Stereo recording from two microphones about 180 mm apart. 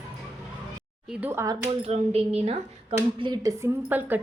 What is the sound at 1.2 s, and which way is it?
Speech, 15° right (ahead or behind).